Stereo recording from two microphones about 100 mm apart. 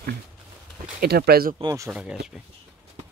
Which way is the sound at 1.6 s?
70° right (ahead or behind).